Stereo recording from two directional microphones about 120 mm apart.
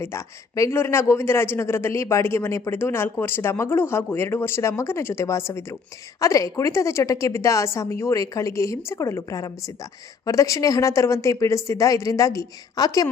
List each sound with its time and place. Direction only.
0.0 s a man's voice: 20° left (ahead or behind)